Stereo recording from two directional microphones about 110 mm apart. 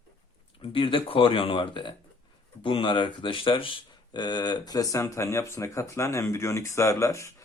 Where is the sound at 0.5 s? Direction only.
55° left (ahead or behind).